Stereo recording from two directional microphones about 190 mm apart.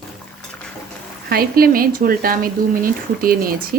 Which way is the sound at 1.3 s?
50° right (ahead or behind).